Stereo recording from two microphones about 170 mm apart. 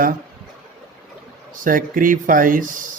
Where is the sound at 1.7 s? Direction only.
55° right (ahead or behind).